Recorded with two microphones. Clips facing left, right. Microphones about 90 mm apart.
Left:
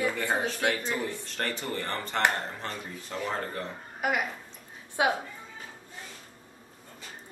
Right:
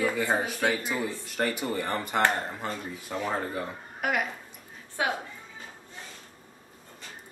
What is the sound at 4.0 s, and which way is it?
Speech, centre (ahead or behind).